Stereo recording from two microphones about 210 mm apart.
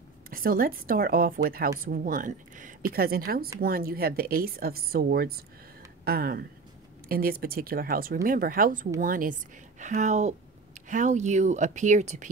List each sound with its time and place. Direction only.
0.3 s speech: 45° right (ahead or behind)